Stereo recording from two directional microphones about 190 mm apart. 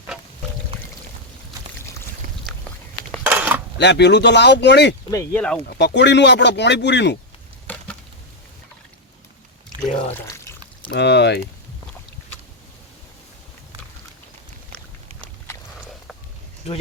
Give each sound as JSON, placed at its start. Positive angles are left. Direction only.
{"t": 3.2, "sound": "mechanisms", "side_deg": -5}
{"t": 3.8, "sound": "speech", "side_deg": 65}
{"t": 5.1, "sound": "speech", "side_deg": 10}
{"t": 5.6, "sound": "speech", "side_deg": 60}
{"t": 7.7, "sound": "a sound", "side_deg": 10}
{"t": 10.9, "sound": "speech", "side_deg": 65}